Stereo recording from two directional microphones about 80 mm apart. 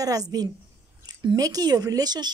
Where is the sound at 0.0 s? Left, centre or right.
Right.